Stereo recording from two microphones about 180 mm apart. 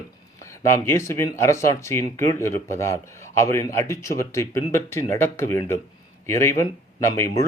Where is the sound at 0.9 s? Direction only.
15° left (ahead or behind).